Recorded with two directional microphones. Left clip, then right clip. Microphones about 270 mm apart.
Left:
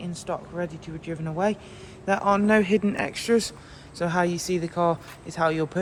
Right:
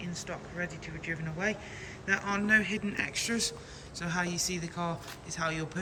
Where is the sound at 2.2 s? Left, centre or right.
Centre.